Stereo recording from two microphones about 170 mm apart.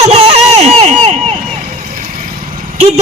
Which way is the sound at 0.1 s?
35° right (ahead or behind).